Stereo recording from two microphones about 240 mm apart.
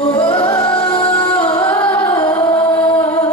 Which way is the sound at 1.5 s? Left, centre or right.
Centre.